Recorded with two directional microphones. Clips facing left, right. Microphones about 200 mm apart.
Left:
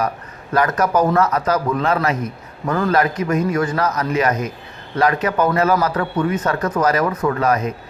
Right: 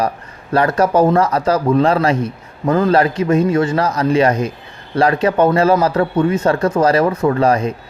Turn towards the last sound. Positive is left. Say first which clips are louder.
# right 4 dB
turn(degrees=-30)  # may be behind; listen again after turning